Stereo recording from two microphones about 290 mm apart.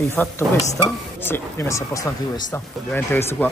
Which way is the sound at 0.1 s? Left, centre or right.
Centre.